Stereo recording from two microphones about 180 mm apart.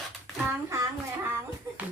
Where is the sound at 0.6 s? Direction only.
15° right (ahead or behind).